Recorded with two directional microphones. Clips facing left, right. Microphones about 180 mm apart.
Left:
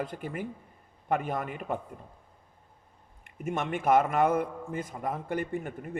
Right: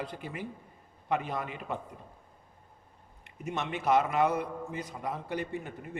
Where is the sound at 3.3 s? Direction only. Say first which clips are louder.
Left 3 dB; 50° left (ahead or behind).